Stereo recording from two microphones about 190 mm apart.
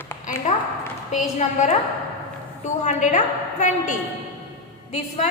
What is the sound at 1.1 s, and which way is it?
Speech, 40° left (ahead or behind).